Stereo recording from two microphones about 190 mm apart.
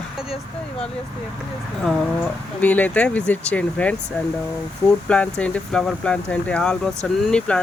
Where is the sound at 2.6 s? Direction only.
10° left (ahead or behind).